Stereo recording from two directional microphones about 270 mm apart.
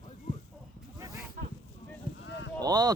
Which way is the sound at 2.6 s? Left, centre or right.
Centre.